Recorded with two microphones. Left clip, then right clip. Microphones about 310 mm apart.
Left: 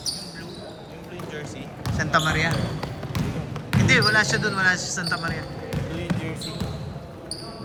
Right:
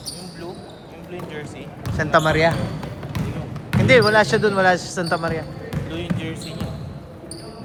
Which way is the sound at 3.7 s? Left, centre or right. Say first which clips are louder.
Right 5 dB; centre.